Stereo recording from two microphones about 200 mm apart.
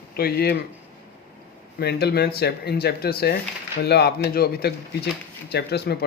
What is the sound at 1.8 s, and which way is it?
Speech, 55° left (ahead or behind).